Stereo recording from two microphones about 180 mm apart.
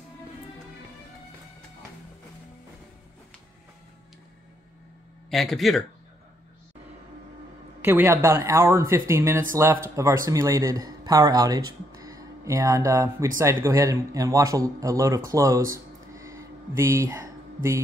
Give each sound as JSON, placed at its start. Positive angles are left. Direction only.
{"t": 5.3, "sound": "speech", "side_deg": 0}
{"t": 7.8, "sound": "speech", "side_deg": -10}